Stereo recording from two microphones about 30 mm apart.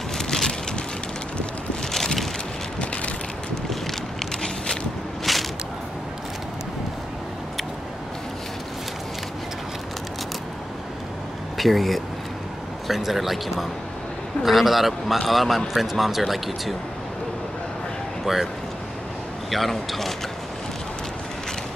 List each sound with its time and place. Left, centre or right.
0.2 s vehicle: centre
5.3 s a sound: centre
11.5 s a man's voice: centre
18.2 s speech: centre
19.5 s a man's voice: centre